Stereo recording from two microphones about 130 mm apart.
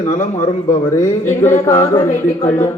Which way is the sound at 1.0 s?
20° left (ahead or behind).